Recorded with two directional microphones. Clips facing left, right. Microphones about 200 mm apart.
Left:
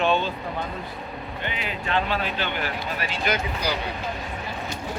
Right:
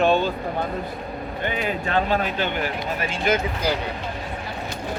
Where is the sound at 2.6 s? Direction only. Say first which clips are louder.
Right 3 dB; 20° right (ahead or behind).